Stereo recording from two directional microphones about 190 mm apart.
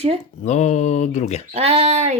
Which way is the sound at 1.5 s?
35° right (ahead or behind).